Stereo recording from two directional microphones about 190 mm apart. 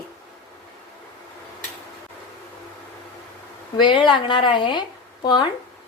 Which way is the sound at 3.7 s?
25° left (ahead or behind).